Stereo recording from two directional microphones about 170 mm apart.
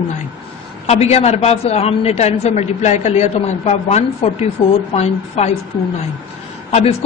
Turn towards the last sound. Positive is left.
turn(degrees=35)  # may be behind; listen again after turning